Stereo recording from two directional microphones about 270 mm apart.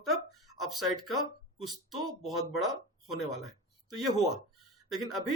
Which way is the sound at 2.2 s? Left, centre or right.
Centre.